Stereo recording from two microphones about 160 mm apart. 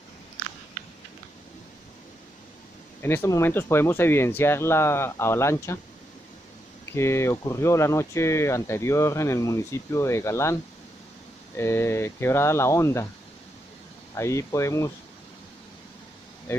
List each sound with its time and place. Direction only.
3.0 s speech: 15° left (ahead or behind)
6.9 s speech: 15° left (ahead or behind)
14.1 s speech: 20° left (ahead or behind)
16.5 s speech: 15° left (ahead or behind)